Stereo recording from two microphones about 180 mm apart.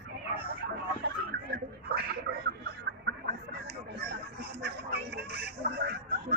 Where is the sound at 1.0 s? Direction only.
65° right (ahead or behind).